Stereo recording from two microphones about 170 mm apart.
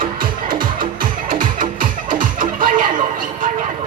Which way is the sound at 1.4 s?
50° right (ahead or behind).